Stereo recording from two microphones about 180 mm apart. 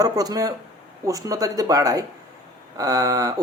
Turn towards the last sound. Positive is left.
turn(degrees=-20)  # may be behind; listen again after turning